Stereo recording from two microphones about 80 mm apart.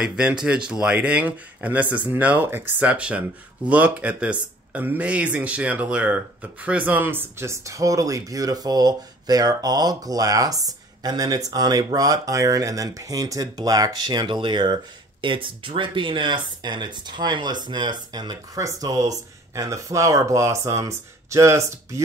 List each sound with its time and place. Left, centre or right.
0.0 s speech: centre; by 14.8 s right
15.2 s speech: right